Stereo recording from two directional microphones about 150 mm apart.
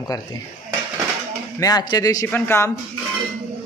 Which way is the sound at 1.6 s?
25° left (ahead or behind).